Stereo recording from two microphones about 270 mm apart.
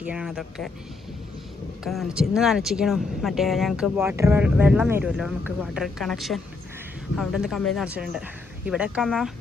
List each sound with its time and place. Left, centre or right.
0.0 s speech: centre
1.8 s speech: centre